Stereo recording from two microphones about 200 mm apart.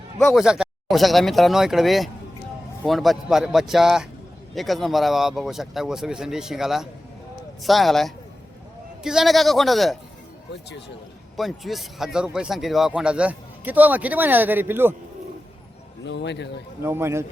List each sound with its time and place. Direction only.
0.2 s a man's voice: centre (ahead or behind)
10.5 s speech: 55° left (ahead or behind)
11.3 s a man's voice: centre (ahead or behind)
16.0 s speech: 60° left (ahead or behind)
16.8 s a man's voice: 10° right (ahead or behind)